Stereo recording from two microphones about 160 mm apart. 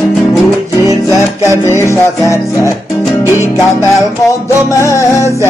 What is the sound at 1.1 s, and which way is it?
Music, 20° left (ahead or behind).